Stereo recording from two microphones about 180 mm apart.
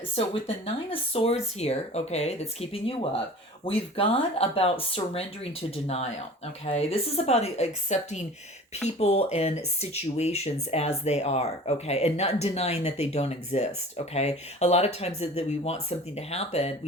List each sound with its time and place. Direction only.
0.4 s speech: 30° left (ahead or behind)